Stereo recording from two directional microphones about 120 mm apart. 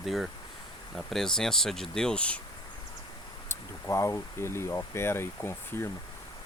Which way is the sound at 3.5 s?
25° left (ahead or behind).